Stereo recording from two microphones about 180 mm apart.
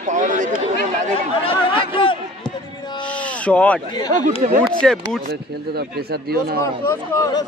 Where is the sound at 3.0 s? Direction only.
5° left (ahead or behind).